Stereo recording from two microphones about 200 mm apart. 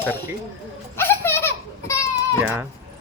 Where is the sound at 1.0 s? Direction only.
10° left (ahead or behind).